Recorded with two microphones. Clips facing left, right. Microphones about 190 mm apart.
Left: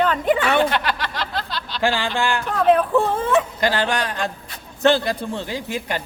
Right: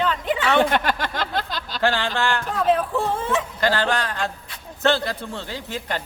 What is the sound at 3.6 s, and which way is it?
A man's voice, 15° left (ahead or behind).